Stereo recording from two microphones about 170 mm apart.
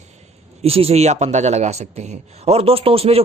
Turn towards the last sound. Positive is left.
turn(degrees=-35)  # may be behind; listen again after turning